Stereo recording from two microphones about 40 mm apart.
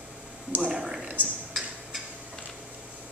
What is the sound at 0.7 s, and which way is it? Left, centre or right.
Speech, centre.